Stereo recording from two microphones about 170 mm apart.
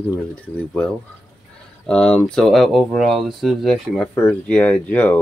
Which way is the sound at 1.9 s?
5° left (ahead or behind).